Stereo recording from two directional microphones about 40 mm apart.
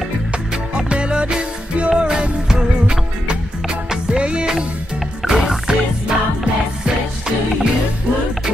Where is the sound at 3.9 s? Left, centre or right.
Right.